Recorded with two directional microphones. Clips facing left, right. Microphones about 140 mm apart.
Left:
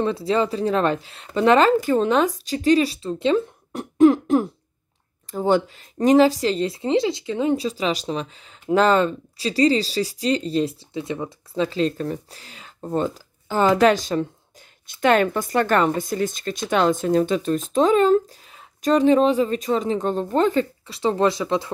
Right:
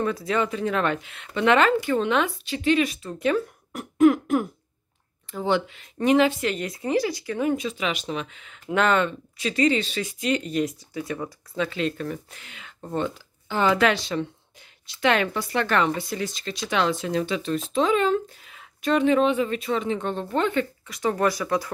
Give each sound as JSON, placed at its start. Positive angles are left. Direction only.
{"t": 0.0, "sound": "speech", "side_deg": 30}
{"t": 7.5, "sound": "speech", "side_deg": 35}